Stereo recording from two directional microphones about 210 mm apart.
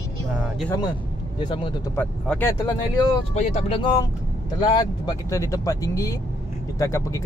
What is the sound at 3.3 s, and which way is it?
Speech, 30° left (ahead or behind).